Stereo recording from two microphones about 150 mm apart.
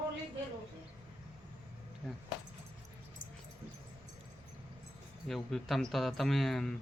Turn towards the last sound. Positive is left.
turn(degrees=5)  # may be behind; listen again after turning